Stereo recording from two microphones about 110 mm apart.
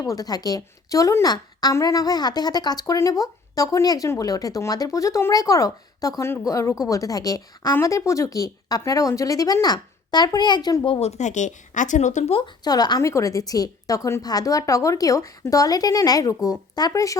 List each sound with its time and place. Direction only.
0.0 s a woman's voice: 35° left (ahead or behind)
11.0 s speech: 80° left
12.4 s speech: 40° left (ahead or behind)
13.0 s speech: 25° left (ahead or behind)